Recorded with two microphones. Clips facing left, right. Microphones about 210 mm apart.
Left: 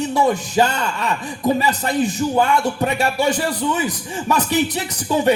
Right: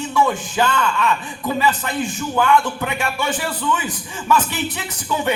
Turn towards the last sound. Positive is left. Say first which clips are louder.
# left 5 dB
turn(degrees=35)  # may be behind; listen again after turning